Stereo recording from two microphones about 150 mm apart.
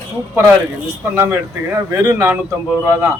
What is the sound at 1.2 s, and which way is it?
A man's voice, 15° right (ahead or behind).